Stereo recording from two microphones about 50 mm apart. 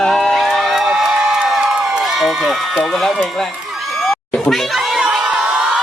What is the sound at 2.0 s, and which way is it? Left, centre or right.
A man's voice, centre.